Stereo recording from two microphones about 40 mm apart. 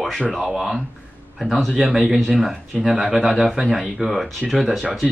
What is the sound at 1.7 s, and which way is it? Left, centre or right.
Speech, centre.